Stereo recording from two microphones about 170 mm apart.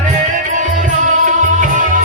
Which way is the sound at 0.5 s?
50° right (ahead or behind).